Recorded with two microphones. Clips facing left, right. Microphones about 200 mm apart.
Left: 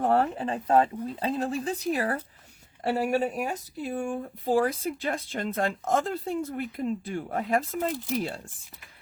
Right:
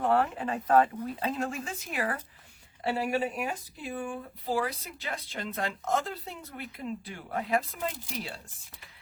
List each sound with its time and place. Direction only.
0.0 s speech: 40° left (ahead or behind)